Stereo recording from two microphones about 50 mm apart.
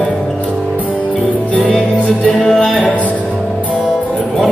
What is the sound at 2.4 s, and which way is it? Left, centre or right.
Music, centre.